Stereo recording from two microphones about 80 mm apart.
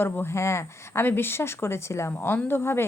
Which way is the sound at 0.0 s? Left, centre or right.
Left.